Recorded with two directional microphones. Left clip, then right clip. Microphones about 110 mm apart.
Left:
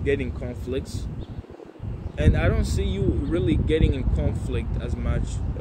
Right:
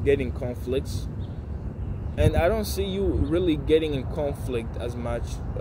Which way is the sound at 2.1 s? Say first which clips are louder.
Right 3 dB; 40° right (ahead or behind).